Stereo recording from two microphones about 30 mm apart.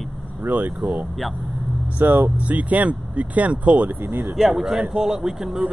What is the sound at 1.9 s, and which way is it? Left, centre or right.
Speech, right.